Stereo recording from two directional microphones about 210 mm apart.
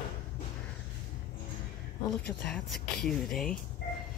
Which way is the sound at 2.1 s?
Centre (ahead or behind).